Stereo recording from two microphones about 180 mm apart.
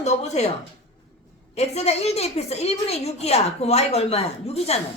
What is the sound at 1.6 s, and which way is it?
A woman's voice, 35° left (ahead or behind).